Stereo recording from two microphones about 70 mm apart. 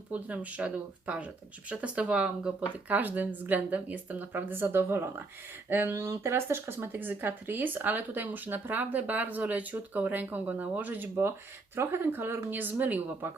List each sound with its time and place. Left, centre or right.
0.1 s speech: right